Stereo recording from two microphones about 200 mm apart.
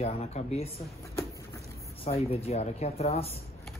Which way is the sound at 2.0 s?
30° left (ahead or behind).